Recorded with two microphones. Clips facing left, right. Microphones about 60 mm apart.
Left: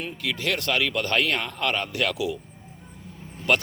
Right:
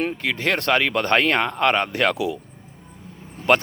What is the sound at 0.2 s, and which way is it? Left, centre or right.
Speech, right.